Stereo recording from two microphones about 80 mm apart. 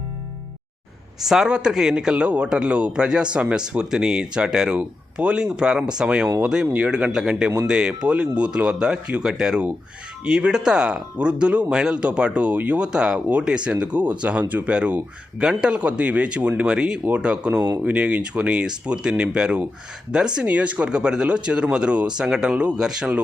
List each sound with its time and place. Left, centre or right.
1.2 s a man's voice: centre